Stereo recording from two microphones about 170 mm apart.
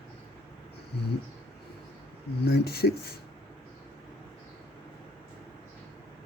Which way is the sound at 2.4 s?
70° left (ahead or behind).